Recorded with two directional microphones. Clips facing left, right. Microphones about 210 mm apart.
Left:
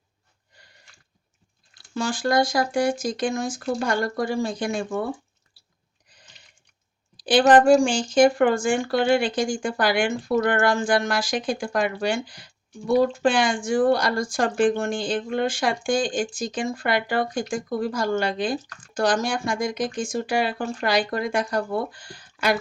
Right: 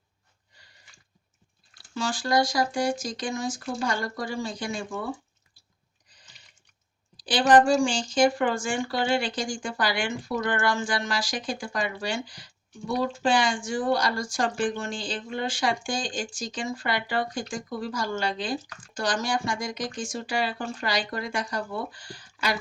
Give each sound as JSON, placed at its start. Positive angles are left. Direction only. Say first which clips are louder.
{"t": 2.0, "sound": "speech", "louder": "left 3 dB", "side_deg": 55}
{"t": 7.2, "sound": "speech", "louder": "left 4 dB", "side_deg": 55}